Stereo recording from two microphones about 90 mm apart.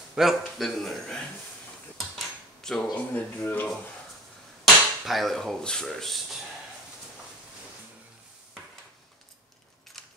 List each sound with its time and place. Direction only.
0.1 s a man's voice: 5° right (ahead or behind)
2.0 s dishes: 5° left (ahead or behind)
2.9 s speech: 15° left (ahead or behind)
4.6 s speech: centre (ahead or behind)
9.9 s a sound: 5° left (ahead or behind)